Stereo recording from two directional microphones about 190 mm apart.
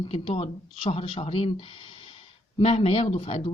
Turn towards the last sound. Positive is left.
turn(degrees=30)  # may be behind; listen again after turning